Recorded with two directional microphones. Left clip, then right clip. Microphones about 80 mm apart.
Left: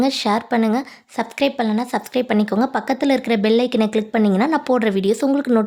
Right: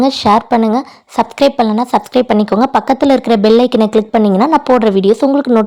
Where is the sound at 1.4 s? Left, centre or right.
Right.